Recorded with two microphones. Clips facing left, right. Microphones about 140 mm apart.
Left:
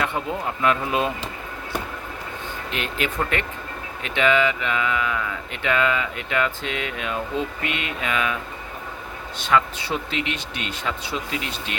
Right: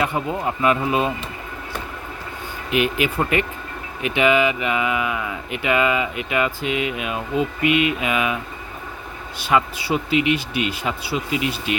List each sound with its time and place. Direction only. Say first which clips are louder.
0.0 s speech: right 3 dB; 5° right (ahead or behind)
2.6 s speech: right 8 dB; 10° right (ahead or behind)
9.4 s speech: right 1 dB; 10° right (ahead or behind)